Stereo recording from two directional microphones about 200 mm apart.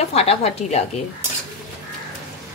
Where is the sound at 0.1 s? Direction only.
30° left (ahead or behind).